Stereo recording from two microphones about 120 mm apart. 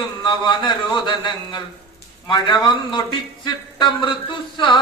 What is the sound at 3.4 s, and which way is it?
A man's voice, 40° left (ahead or behind).